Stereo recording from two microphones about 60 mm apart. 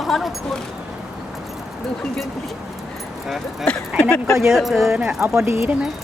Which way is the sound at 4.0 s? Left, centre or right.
Centre.